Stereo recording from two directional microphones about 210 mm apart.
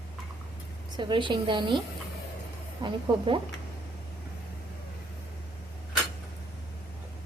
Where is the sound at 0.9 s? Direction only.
20° right (ahead or behind).